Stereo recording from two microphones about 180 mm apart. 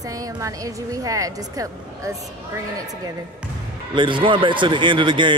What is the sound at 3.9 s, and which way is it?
Speech, 25° right (ahead or behind).